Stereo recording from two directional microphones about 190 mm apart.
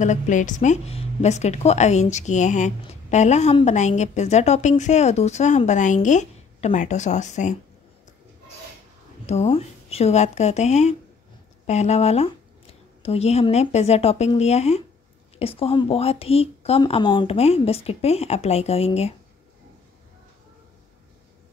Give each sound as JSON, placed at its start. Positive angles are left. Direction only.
{"t": 0.0, "sound": "speech", "side_deg": 40}
{"t": 9.2, "sound": "speech", "side_deg": 35}